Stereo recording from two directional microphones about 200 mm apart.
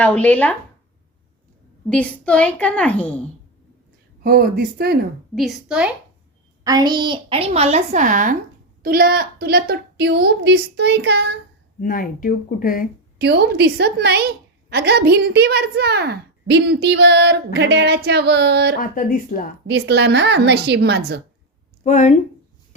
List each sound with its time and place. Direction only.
0.0 s a woman's voice: 5° left (ahead or behind)
1.9 s a woman's voice: 5° left (ahead or behind)
4.2 s a woman's voice: 50° right (ahead or behind)
5.3 s a child's voice: centre (ahead or behind)
6.7 s a woman's voice: 20° right (ahead or behind); by 11.3 s 55° right (ahead or behind)
11.8 s speech: 45° left (ahead or behind)
13.1 s a woman's voice: 55° right (ahead or behind)
18.8 s speech: 45° left (ahead or behind)
19.6 s a woman's voice: 60° right (ahead or behind)
21.8 s speech: 35° left (ahead or behind)